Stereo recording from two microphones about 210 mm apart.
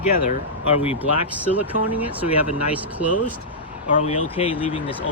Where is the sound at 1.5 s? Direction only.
10° right (ahead or behind).